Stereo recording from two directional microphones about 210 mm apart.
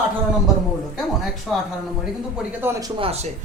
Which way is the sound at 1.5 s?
Centre (ahead or behind).